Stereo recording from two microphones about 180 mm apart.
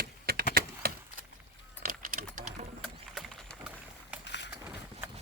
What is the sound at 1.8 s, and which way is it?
Typing, 50° right (ahead or behind).